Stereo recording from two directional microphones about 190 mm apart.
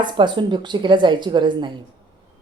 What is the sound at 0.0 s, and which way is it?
A woman's voice, 25° right (ahead or behind).